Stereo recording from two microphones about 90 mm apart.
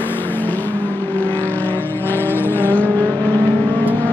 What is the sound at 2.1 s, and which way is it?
Vehicle, 25° left (ahead or behind).